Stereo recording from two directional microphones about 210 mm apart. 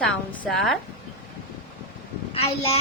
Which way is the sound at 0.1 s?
Centre (ahead or behind).